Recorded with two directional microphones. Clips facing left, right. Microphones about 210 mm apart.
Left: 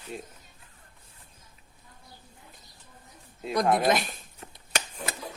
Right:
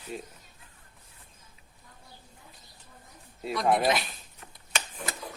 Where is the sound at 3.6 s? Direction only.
Centre (ahead or behind).